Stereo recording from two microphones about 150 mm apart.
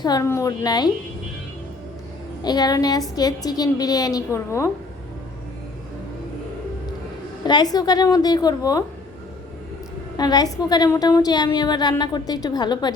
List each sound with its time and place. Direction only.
0.0 s a woman's voice: 25° left (ahead or behind)
2.4 s a woman's voice: 25° left (ahead or behind)
7.4 s a woman's voice: 30° left (ahead or behind)
10.2 s a woman's voice: 25° left (ahead or behind)